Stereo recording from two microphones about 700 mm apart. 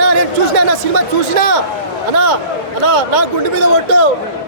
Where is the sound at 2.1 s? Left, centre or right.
Right.